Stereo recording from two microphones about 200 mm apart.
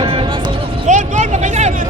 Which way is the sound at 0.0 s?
25° right (ahead or behind).